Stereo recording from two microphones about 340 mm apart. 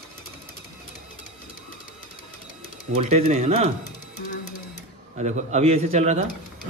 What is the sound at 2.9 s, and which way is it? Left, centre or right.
Speech, centre.